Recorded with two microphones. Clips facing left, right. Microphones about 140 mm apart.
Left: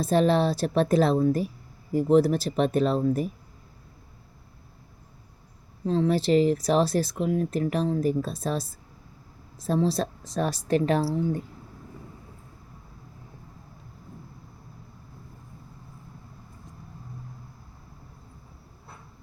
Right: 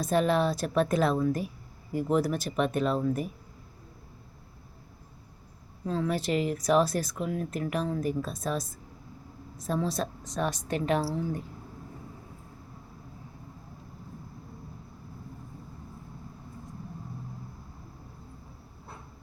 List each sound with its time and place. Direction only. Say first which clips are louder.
0.0 s speech: left 3 dB; 30° left (ahead or behind)
5.8 s speech: left 6 dB; 30° left (ahead or behind)